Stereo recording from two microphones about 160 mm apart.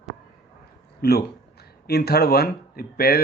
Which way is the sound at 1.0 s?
75° left (ahead or behind).